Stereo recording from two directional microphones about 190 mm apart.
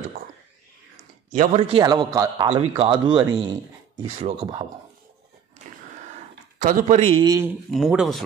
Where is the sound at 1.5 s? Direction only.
30° right (ahead or behind).